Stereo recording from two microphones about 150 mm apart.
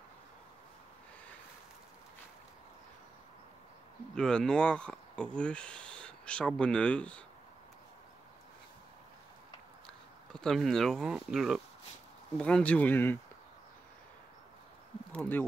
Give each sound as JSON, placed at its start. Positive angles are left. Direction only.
{"t": 4.1, "sound": "speech", "side_deg": 5}
{"t": 9.8, "sound": "speech", "side_deg": 5}
{"t": 12.4, "sound": "speech", "side_deg": 5}
{"t": 15.1, "sound": "speech", "side_deg": 10}